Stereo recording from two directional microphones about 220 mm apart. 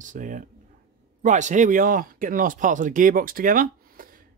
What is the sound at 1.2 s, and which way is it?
Speech, 35° right (ahead or behind).